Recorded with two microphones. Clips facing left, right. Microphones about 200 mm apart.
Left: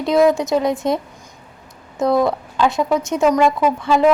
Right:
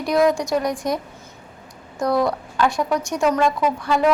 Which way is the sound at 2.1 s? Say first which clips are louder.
Left 3 dB; 20° left (ahead or behind).